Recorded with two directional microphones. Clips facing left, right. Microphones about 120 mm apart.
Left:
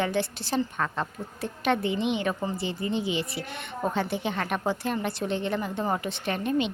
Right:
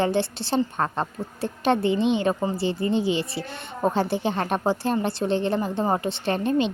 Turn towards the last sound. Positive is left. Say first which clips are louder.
# right 4 dB
turn(degrees=-30)  # may be behind; listen again after turning